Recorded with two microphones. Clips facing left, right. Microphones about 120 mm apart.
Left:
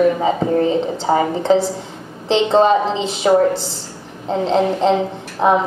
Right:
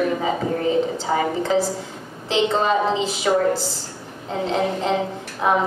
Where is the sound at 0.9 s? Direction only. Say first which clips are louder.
Left 4 dB; 30° left (ahead or behind).